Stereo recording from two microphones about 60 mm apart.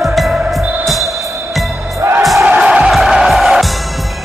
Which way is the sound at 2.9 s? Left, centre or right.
Centre.